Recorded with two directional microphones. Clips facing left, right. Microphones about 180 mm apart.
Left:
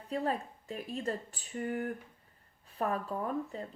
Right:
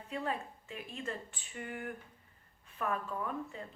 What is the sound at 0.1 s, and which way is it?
Speech, 35° left (ahead or behind).